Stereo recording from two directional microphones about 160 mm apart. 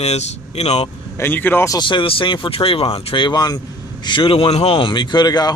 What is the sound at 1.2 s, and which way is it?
Speech, 10° left (ahead or behind).